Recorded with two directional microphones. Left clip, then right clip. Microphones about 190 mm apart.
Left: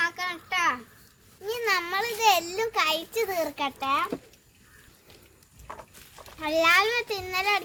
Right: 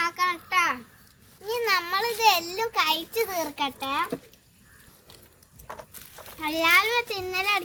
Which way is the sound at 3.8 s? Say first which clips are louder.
Left 4 dB; 15° left (ahead or behind).